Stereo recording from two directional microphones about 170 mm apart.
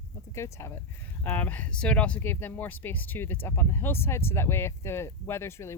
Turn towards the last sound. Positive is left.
turn(degrees=15)  # may be behind; listen again after turning